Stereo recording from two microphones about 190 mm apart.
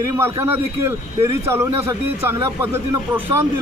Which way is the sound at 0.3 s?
15° right (ahead or behind).